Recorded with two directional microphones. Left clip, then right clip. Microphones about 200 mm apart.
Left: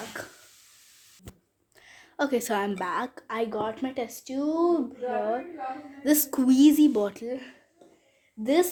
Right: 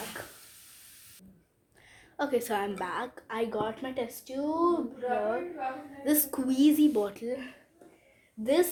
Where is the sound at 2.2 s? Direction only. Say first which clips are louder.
Left 3 dB; 40° left (ahead or behind).